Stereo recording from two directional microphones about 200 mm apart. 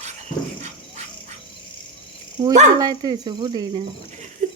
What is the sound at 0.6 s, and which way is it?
Insect, 35° right (ahead or behind).